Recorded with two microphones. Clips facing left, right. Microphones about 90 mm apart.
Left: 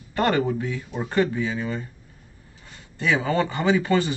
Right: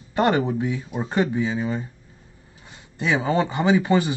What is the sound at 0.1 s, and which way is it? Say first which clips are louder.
Speech: right 2 dB; 20° right (ahead or behind).